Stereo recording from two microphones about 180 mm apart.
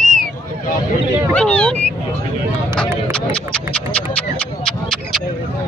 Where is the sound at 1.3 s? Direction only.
5° left (ahead or behind).